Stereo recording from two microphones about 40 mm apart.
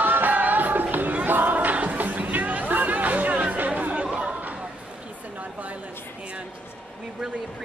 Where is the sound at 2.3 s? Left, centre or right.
Right.